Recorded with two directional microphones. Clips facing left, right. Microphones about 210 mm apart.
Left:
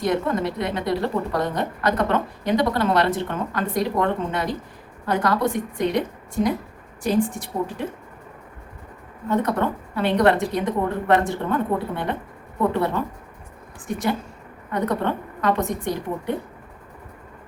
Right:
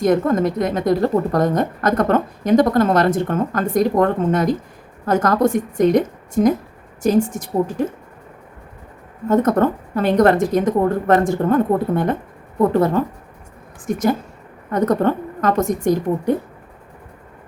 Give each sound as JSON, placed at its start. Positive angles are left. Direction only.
{"t": 0.0, "sound": "a woman's voice", "side_deg": -45}
{"t": 9.3, "sound": "a woman's voice", "side_deg": -45}